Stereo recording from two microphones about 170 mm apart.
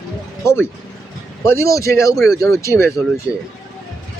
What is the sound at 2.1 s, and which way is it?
Speech, centre (ahead or behind).